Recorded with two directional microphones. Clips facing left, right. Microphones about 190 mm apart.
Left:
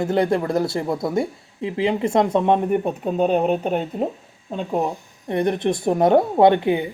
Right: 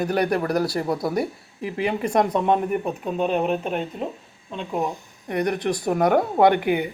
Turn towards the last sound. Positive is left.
turn(degrees=25)  # may be behind; listen again after turning